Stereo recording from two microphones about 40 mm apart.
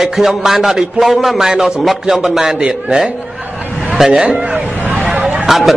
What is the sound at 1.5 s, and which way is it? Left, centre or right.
A man's voice, centre.